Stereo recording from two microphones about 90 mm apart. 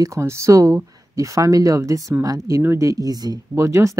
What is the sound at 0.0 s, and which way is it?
Speech, 35° right (ahead or behind).